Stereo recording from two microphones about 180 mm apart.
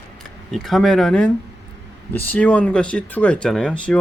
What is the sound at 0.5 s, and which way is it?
Speech, centre (ahead or behind).